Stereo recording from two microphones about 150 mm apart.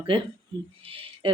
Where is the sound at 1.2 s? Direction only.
35° right (ahead or behind).